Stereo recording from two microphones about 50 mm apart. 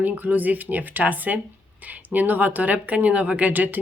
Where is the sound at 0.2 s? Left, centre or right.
Right.